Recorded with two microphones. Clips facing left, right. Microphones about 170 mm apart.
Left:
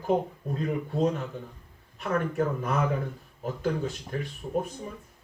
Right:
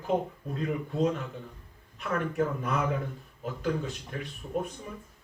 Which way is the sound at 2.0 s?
40° left (ahead or behind).